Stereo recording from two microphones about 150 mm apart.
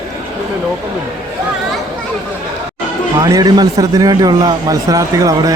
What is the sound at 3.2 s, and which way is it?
A man's voice, 25° right (ahead or behind).